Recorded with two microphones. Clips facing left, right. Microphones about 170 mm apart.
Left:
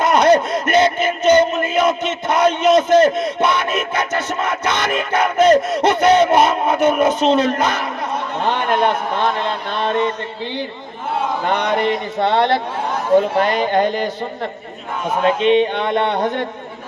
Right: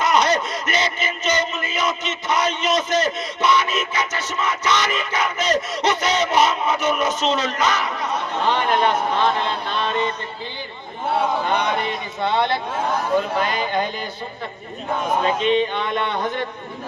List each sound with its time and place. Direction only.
0.0 s music: 55° left (ahead or behind)
11.4 s speech: 80° left
13.4 s speech: 70° left (ahead or behind)
15.4 s a sound: 60° left (ahead or behind)